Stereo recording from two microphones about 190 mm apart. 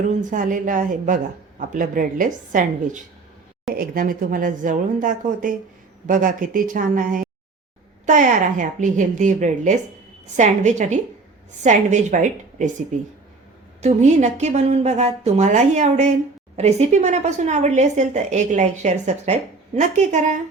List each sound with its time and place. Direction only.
0.1 s a woman's voice: 40° right (ahead or behind)
13.8 s a woman's voice: 35° right (ahead or behind)